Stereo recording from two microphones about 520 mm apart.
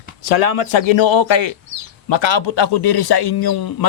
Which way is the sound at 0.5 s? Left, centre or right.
Left.